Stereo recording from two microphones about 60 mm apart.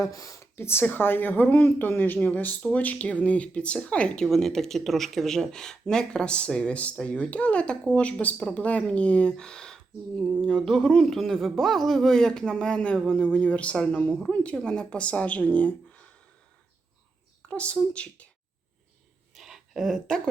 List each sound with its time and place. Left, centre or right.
0.0 s speech: left
0.5 s a woman's voice: left; by 4.3 s centre
4.3 s speech: centre
13.2 s speech: left
17.5 s speech: left
19.3 s a sound: centre